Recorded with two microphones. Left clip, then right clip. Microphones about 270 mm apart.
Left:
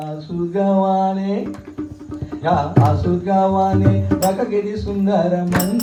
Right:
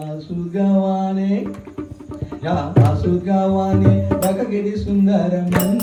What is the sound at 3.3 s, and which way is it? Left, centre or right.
A man's voice, left.